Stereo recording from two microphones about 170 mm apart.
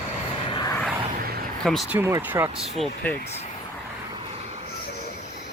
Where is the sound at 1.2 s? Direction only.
60° right (ahead or behind).